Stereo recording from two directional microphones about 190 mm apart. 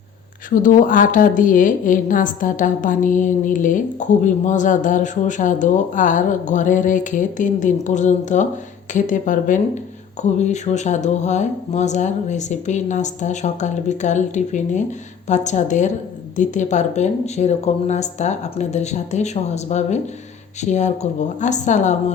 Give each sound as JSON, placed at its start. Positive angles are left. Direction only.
{"t": 0.5, "sound": "a woman's voice", "side_deg": 45}